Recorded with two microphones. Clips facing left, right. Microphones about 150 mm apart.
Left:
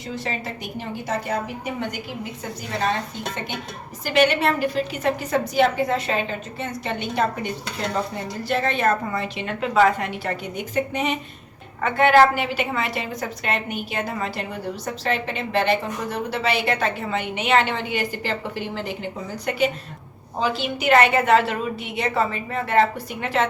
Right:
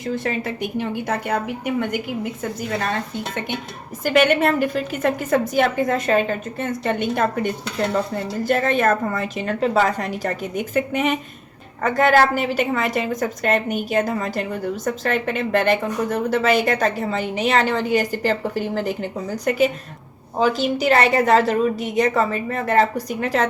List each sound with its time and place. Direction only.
0.0 s a woman's voice: 50° right (ahead or behind)
4.0 s a woman's voice: 50° right (ahead or behind)
11.8 s a woman's voice: 40° right (ahead or behind)